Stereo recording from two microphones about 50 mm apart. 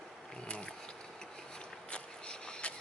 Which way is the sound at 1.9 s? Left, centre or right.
Centre.